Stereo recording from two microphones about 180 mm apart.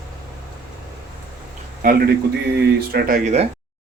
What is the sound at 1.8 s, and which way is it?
Speech, 55° right (ahead or behind).